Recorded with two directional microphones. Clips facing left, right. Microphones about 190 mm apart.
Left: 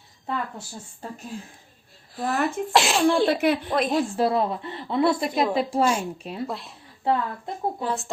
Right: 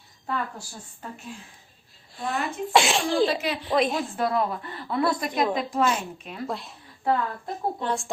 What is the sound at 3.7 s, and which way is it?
Speech, centre (ahead or behind).